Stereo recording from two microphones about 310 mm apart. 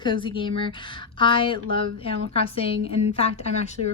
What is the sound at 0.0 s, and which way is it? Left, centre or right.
A woman's voice, centre.